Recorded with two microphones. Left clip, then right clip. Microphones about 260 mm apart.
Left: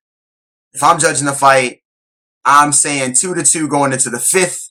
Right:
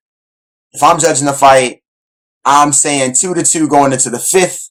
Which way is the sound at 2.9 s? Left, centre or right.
Left.